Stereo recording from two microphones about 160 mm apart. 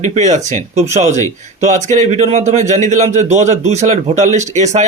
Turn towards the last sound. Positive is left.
turn(degrees=-45)  # may be behind; listen again after turning